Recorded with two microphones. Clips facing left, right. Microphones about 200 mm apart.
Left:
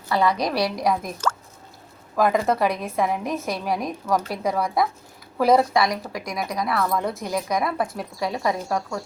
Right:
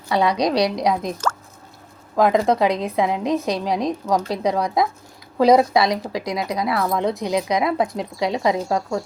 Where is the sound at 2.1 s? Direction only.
20° right (ahead or behind).